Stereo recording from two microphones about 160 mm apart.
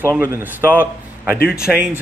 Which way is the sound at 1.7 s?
Centre (ahead or behind).